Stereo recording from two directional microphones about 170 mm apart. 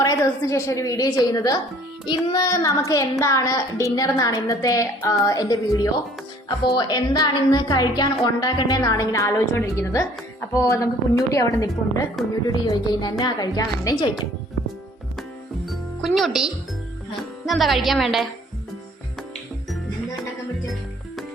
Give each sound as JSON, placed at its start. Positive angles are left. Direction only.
{"t": 0.0, "sound": "a child's voice", "side_deg": 20}
{"t": 15.7, "sound": "music", "side_deg": 0}
{"t": 17.4, "sound": "a woman's voice", "side_deg": 0}